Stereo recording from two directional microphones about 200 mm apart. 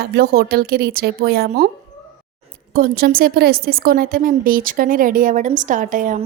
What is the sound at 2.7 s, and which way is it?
A woman's voice, 45° right (ahead or behind).